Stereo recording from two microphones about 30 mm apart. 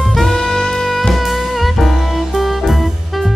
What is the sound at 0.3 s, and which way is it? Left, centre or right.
Saxophone, left.